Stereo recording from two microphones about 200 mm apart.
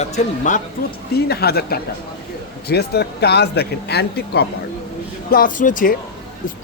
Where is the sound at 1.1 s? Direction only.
50° left (ahead or behind).